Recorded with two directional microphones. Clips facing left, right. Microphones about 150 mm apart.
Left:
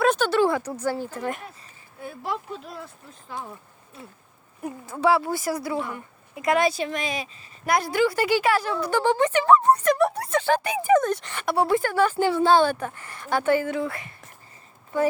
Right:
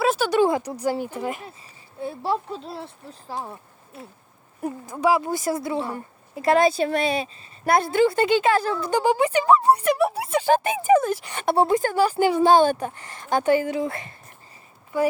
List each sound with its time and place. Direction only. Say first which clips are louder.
0.0 s a sound: left 1 dB; 5° right (ahead or behind)
0.3 s speech: right 2 dB; 15° right (ahead or behind)
2.0 s speech: right 5 dB; 30° right (ahead or behind)
4.9 s a woman's voice: even; 15° right (ahead or behind)
10.9 s a woman's voice: right 1 dB; 5° right (ahead or behind)
11.3 s a woman's voice: right 3 dB; 25° right (ahead or behind)
12.0 s a woman's voice: right 4 dB; 15° right (ahead or behind)